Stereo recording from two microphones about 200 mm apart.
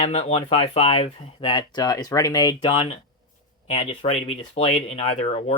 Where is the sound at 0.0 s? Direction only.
30° left (ahead or behind).